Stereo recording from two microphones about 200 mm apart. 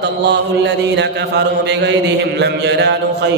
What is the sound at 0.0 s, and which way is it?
Mantra, 60° right (ahead or behind).